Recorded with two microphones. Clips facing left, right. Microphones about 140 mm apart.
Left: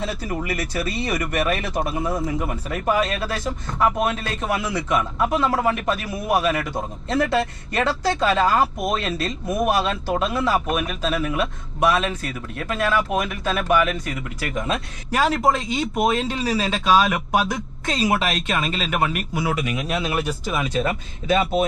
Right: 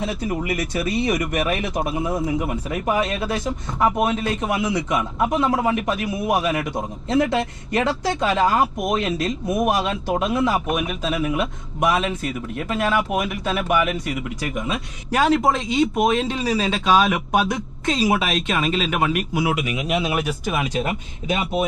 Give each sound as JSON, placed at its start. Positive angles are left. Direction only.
{"t": 0.1, "sound": "a man's voice", "side_deg": -20}
{"t": 2.2, "sound": "speech", "side_deg": 0}
{"t": 2.5, "sound": "a man's voice", "side_deg": -15}
{"t": 15.1, "sound": "a man's voice", "side_deg": 0}